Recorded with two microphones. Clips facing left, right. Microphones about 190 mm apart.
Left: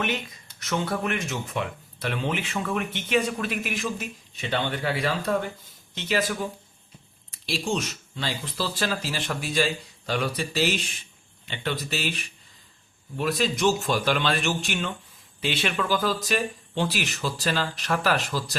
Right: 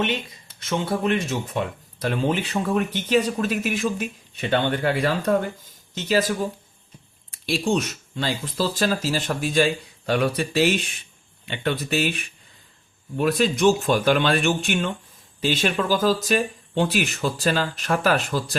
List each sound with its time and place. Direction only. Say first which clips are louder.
0.6 s speech: right 3 dB; 25° right (ahead or behind)
7.7 s speech: right 5 dB; 50° right (ahead or behind)
10.1 s speech: right 6 dB; 60° right (ahead or behind)
15.4 s speech: right 5 dB; 40° right (ahead or behind)